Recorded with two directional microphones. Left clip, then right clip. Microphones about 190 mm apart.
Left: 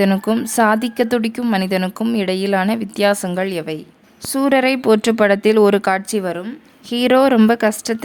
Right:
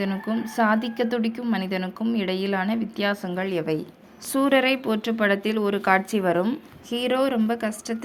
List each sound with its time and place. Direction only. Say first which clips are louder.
0.0 s a woman's voice: left 11 dB; 50° left (ahead or behind); by 6.3 s 25° left (ahead or behind)
6.9 s a woman's voice: left 10 dB; 45° left (ahead or behind)